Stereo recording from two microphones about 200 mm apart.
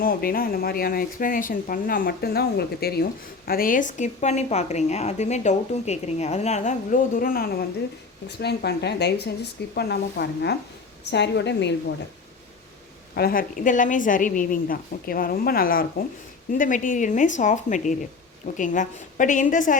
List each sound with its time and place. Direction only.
0.0 s speech: 45° left (ahead or behind)
13.1 s speech: 50° left (ahead or behind)